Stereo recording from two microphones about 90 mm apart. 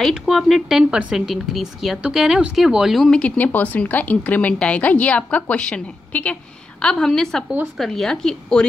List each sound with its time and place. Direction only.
0.1 s speech: centre (ahead or behind)
3.2 s a woman's voice: 15° left (ahead or behind)